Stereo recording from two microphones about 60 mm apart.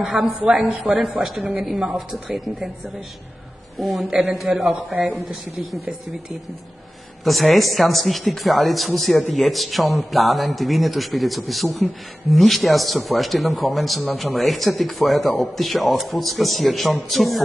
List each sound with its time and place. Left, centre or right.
0.0 s speech: centre
3.7 s speech: centre
4.6 s a man's voice: right
5.1 s speech: centre
7.2 s speech: centre